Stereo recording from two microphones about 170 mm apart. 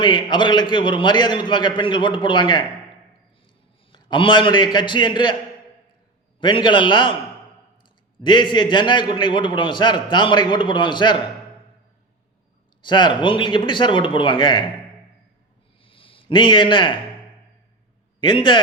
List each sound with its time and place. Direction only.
0.0 s a man's voice: 25° left (ahead or behind)
3.9 s a man's voice: 30° left (ahead or behind)
6.4 s a man's voice: 30° left (ahead or behind)
8.2 s a man's voice: 25° left (ahead or behind)
12.8 s a man's voice: 25° left (ahead or behind)
15.8 s a sound: 30° left (ahead or behind)
18.2 s a man's voice: 30° left (ahead or behind)